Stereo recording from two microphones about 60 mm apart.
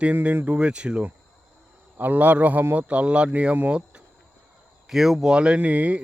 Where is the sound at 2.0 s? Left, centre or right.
Right.